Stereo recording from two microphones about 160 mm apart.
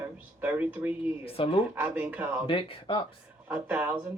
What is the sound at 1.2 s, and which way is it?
Speech, 35° left (ahead or behind).